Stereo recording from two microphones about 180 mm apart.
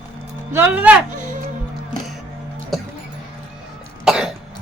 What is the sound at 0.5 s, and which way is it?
Speech, 10° right (ahead or behind).